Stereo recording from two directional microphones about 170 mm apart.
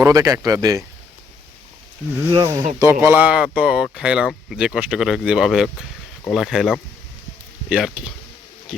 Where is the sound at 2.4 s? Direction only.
20° right (ahead or behind).